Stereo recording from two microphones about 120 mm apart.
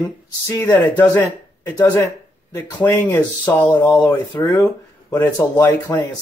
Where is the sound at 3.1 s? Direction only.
15° left (ahead or behind).